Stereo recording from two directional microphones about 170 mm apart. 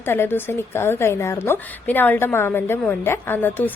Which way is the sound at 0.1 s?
15° left (ahead or behind).